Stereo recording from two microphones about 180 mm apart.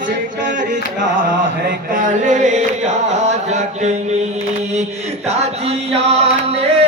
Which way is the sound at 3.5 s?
40° right (ahead or behind).